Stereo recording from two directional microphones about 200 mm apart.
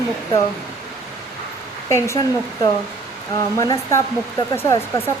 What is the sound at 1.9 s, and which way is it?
Speech, 15° left (ahead or behind).